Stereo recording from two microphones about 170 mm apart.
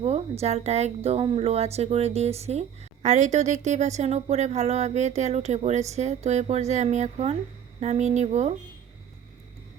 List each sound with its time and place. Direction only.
0.0 s a woman's voice: 35° right (ahead or behind)